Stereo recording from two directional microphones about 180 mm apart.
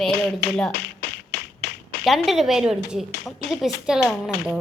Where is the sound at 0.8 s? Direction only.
65° left (ahead or behind).